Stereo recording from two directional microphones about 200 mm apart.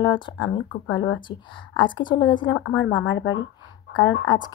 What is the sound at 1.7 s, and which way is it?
Speech, 25° left (ahead or behind).